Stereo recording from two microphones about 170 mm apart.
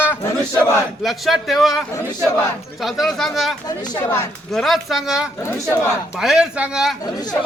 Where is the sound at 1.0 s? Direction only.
Centre (ahead or behind).